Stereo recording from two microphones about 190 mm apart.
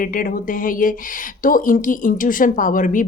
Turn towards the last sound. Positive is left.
turn(degrees=45)  # may be behind; listen again after turning